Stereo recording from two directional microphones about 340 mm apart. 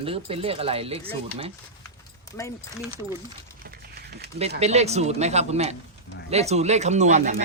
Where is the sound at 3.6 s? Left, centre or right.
Right.